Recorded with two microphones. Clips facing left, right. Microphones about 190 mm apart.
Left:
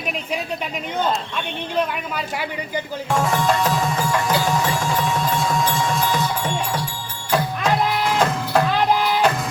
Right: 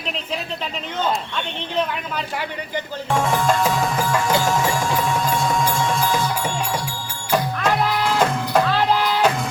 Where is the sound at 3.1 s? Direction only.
Centre (ahead or behind).